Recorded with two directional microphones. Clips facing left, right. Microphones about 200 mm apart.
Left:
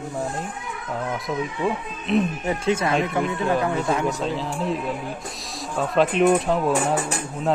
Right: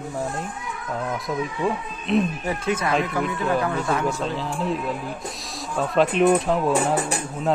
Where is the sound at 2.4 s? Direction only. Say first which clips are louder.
Left 2 dB; 25° left (ahead or behind).